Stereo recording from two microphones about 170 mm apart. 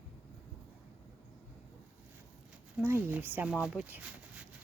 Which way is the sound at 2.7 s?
10° right (ahead or behind).